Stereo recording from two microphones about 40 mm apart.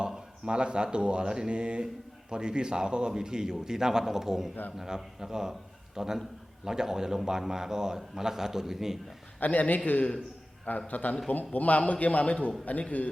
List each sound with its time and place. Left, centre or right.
0.4 s a man's voice: right
9.4 s a man's voice: left